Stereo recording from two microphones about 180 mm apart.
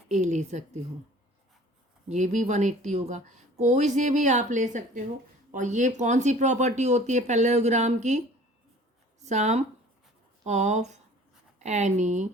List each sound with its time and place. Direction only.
0.1 s speech: 40° right (ahead or behind)
2.0 s speech: 40° right (ahead or behind)
9.2 s speech: 40° right (ahead or behind)